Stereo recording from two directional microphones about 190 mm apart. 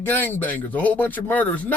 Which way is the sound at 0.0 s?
10° left (ahead or behind).